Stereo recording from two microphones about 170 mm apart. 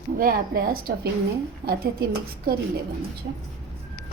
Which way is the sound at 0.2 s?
55° right (ahead or behind).